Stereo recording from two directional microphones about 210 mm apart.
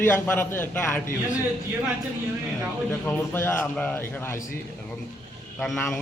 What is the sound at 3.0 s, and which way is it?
A man's voice, 10° left (ahead or behind).